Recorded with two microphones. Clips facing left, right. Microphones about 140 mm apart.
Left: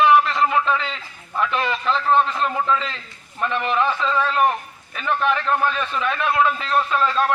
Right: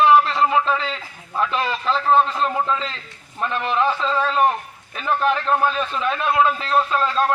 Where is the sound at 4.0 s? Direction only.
35° right (ahead or behind).